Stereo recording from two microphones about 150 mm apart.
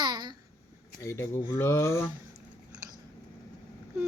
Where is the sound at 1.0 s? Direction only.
20° left (ahead or behind).